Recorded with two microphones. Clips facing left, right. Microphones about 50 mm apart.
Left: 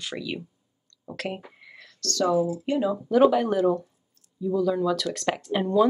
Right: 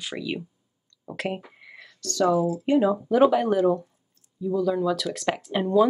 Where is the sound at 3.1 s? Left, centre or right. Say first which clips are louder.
Left 1 dB; centre.